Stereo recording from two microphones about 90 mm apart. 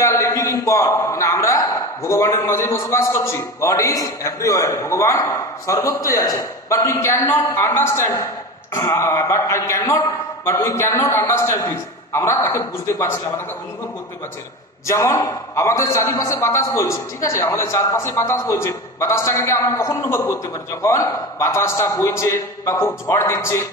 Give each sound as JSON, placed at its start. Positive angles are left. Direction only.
{"t": 0.0, "sound": "a man's voice", "side_deg": 30}
{"t": 14.9, "sound": "a man's voice", "side_deg": 35}